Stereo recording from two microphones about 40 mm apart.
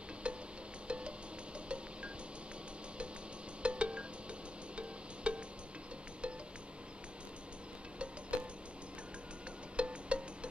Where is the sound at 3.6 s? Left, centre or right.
Right.